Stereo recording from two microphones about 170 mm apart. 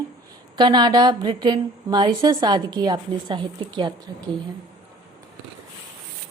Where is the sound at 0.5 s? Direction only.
25° right (ahead or behind).